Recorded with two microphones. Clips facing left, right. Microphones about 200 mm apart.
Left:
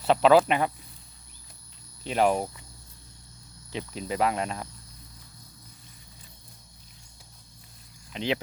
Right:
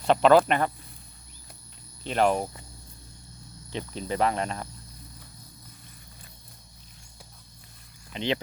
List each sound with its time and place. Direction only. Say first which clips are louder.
0.0 s cricket: even; 5° left (ahead or behind)
2.0 s speech: even; 10° left (ahead or behind)
3.7 s cricket: right 1 dB; 5° left (ahead or behind)
8.1 s speech: even; 5° left (ahead or behind)